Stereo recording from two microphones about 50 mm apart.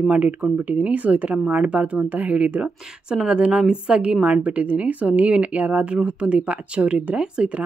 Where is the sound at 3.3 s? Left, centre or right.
Right.